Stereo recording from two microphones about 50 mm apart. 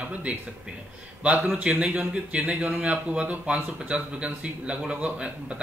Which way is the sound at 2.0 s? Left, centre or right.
Right.